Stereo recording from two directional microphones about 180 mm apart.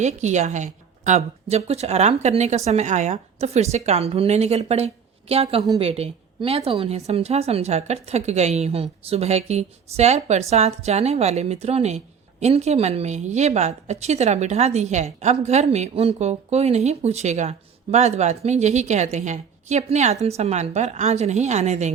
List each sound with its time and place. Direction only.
0.0 s speech: 40° right (ahead or behind)